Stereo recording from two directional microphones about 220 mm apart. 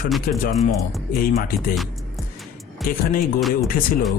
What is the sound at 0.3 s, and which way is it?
A man's voice, 40° left (ahead or behind).